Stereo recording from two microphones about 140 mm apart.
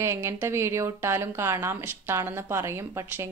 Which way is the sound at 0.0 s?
20° right (ahead or behind).